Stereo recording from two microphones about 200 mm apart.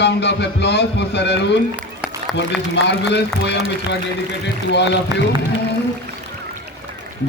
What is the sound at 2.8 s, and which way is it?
A man's voice, 60° left (ahead or behind).